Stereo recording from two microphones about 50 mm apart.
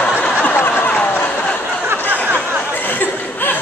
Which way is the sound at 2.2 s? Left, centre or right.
Right.